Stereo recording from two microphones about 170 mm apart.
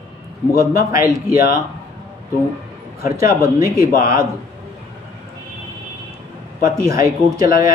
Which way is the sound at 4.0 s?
20° right (ahead or behind).